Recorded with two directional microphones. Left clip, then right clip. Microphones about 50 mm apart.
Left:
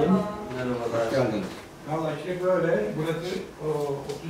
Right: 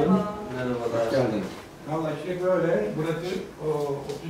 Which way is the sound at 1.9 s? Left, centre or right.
Centre.